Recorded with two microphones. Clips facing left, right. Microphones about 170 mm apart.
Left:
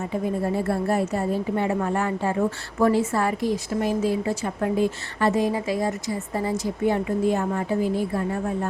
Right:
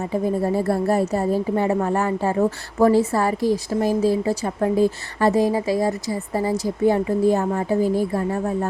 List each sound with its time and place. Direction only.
0.3 s a woman's voice: 40° right (ahead or behind)